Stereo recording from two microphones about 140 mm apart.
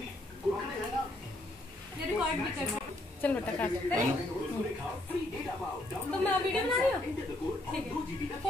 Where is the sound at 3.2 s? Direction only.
10° left (ahead or behind).